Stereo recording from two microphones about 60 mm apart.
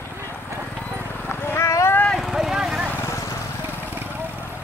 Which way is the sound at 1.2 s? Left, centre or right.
Left.